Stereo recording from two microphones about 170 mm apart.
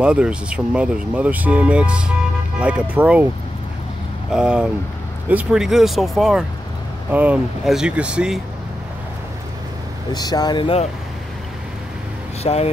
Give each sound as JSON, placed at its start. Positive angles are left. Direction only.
{"t": 0.0, "sound": "speech", "side_deg": -5}
{"t": 4.3, "sound": "speech", "side_deg": -5}
{"t": 10.1, "sound": "speech", "side_deg": 25}
{"t": 12.4, "sound": "speech", "side_deg": 35}